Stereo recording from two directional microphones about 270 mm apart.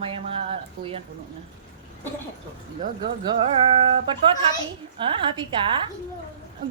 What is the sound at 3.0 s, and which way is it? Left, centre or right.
Speech, centre.